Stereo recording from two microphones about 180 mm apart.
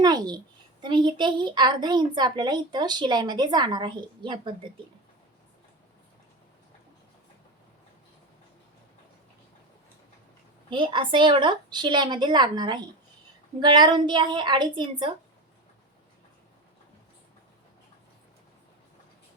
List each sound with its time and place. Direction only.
0.0 s a woman's voice: 25° right (ahead or behind)
10.7 s a woman's voice: 25° right (ahead or behind)